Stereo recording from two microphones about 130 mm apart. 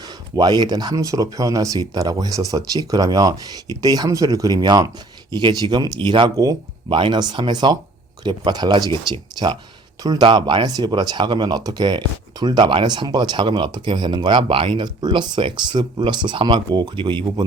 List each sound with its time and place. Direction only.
0.0 s speech: 30° right (ahead or behind)